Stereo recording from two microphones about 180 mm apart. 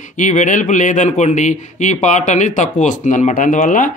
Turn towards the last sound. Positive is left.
turn(degrees=45)  # may be behind; listen again after turning